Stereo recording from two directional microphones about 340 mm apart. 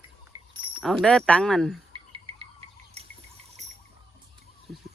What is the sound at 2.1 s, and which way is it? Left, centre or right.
Music, centre.